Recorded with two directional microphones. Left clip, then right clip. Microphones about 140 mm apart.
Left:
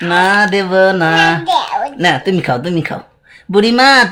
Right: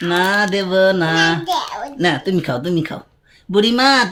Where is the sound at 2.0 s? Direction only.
45° left (ahead or behind).